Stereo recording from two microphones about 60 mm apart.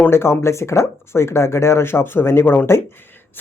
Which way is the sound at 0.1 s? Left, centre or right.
Left.